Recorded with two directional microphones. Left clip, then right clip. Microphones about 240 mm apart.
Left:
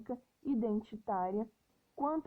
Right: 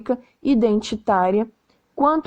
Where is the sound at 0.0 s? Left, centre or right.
Right.